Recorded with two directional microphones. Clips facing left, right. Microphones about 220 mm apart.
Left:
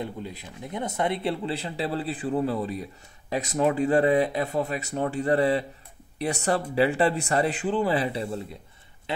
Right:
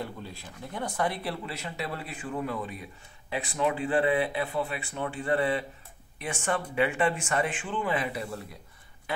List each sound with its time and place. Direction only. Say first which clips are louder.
0.0 s speech: left 4 dB; 20° left (ahead or behind)